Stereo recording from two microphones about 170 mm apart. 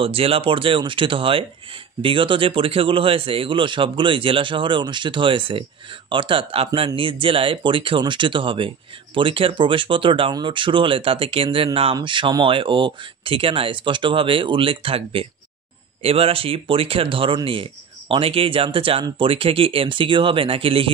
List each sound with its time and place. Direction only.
0.0 s speech: 35° right (ahead or behind)